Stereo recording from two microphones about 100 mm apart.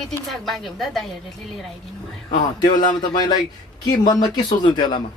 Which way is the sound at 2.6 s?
45° left (ahead or behind).